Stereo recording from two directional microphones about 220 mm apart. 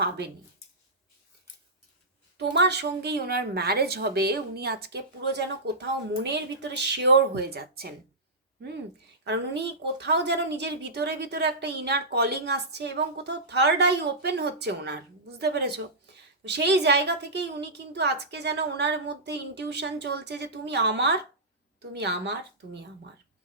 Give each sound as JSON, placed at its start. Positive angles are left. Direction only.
{"t": 2.4, "sound": "a woman's voice", "side_deg": -50}
{"t": 9.2, "sound": "a woman's voice", "side_deg": -50}